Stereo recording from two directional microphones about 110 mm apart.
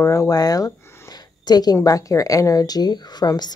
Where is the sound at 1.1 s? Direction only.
40° left (ahead or behind).